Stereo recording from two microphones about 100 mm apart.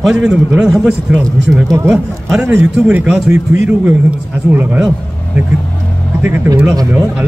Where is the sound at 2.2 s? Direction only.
10° right (ahead or behind).